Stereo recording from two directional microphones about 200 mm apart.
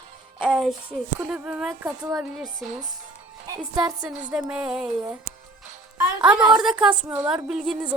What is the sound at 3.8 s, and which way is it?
Speech, 5° right (ahead or behind).